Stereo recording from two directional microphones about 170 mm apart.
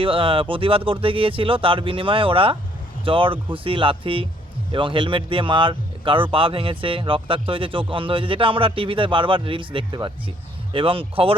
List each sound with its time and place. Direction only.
0.0 s speech: 30° right (ahead or behind)